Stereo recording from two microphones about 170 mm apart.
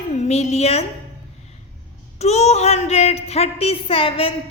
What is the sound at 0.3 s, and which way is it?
Speech, 40° left (ahead or behind).